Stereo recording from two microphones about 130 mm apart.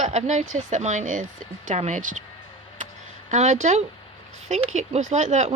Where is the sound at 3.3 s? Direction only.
65° right (ahead or behind).